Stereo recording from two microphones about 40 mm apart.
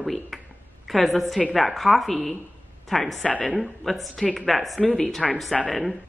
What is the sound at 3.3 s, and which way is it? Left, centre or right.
Speech, left.